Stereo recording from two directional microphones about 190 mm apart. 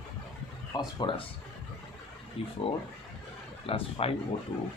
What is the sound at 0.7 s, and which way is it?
Speech, 20° left (ahead or behind).